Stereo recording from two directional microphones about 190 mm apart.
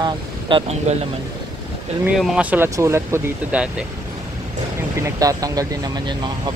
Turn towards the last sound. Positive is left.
turn(degrees=-20)  # may be behind; listen again after turning